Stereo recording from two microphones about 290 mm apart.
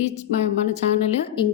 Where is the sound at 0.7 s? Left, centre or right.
Centre.